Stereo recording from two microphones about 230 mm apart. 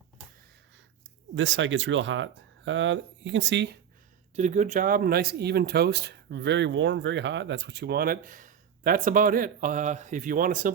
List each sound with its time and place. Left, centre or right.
1.4 s speech: right
4.4 s speech: right